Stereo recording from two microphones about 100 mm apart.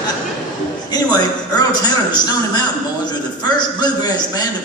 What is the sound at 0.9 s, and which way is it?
A man's voice, 40° left (ahead or behind).